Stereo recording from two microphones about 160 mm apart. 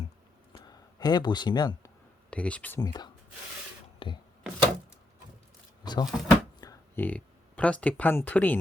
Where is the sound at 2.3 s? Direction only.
10° left (ahead or behind).